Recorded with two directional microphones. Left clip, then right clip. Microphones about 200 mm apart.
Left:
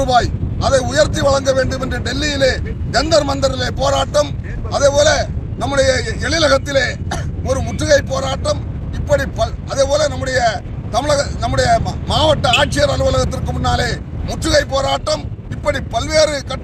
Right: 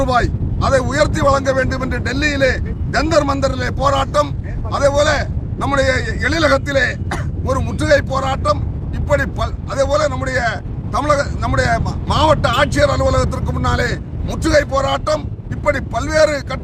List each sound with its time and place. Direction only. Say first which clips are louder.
0.0 s vehicle: left 2 dB; centre (ahead or behind)
0.8 s speech: left 1 dB; centre (ahead or behind)
14.8 s speech: even; 25° right (ahead or behind)